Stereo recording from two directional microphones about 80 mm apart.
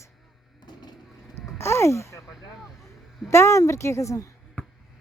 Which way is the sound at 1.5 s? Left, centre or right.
Left.